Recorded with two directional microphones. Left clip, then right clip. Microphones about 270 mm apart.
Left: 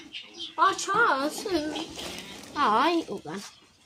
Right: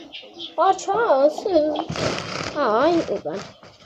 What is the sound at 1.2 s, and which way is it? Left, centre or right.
A woman's voice, centre.